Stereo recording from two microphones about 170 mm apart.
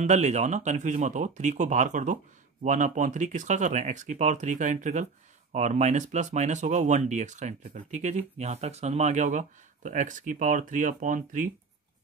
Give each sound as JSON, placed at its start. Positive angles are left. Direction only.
{"t": 0.0, "sound": "speech", "side_deg": -45}